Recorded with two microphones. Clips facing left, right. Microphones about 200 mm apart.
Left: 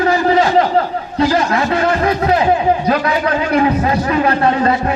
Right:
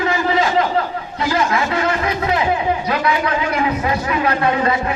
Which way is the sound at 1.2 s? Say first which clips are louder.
Left 4 dB; 35° left (ahead or behind).